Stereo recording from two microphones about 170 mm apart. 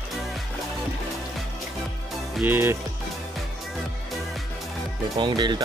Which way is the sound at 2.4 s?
15° right (ahead or behind).